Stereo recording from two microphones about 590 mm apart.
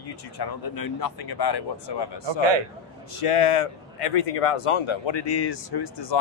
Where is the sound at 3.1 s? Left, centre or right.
Left.